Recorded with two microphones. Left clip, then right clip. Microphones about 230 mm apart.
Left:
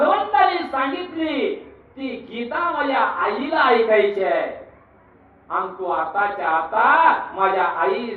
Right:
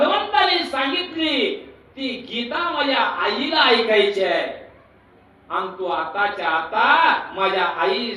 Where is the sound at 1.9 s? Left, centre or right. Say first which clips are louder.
Right 3 dB; right.